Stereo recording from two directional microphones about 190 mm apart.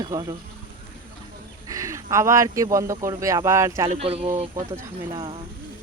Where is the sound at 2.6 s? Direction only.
15° right (ahead or behind).